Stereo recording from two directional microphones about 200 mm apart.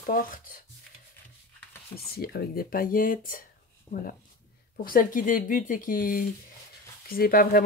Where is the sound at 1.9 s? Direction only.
50° left (ahead or behind).